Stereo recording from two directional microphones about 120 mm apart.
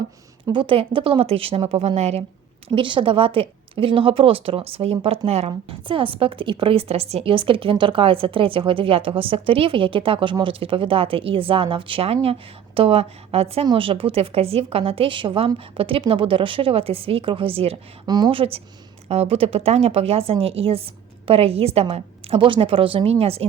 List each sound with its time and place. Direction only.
0.4 s a woman's voice: 40° right (ahead or behind); by 2.2 s 60° right (ahead or behind)
2.6 s a woman's voice: 45° right (ahead or behind)
18.0 s speech: 35° right (ahead or behind)
18.3 s a woman's voice: 50° right (ahead or behind)